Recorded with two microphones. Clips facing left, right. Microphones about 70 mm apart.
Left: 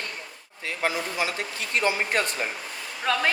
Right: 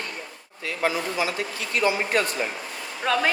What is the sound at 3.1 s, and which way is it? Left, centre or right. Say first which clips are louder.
Speech: right 2 dB; centre.